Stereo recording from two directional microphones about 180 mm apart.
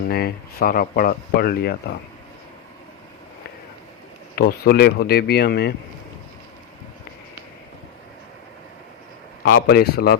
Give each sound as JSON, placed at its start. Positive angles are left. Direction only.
{"t": 0.1, "sound": "speech", "side_deg": 60}
{"t": 4.4, "sound": "speech", "side_deg": 55}
{"t": 9.4, "sound": "speech", "side_deg": 65}